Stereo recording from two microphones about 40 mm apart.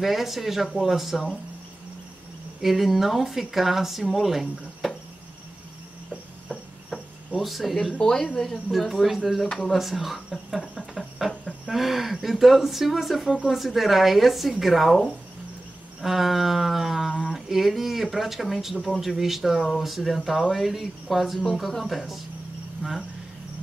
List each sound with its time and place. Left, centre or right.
0.0 s speech: centre
2.6 s speech: centre
7.3 s speech: centre
8.0 s speech: centre
8.7 s speech: centre
16.0 s speech: centre
22.8 s speech: right